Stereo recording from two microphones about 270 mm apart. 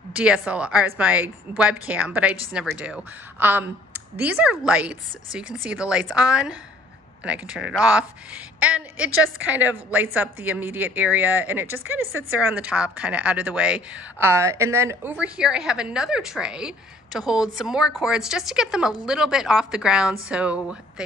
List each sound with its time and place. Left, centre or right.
0.1 s a woman's voice: centre